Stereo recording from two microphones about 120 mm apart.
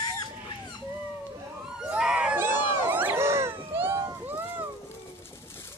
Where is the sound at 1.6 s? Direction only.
5° right (ahead or behind).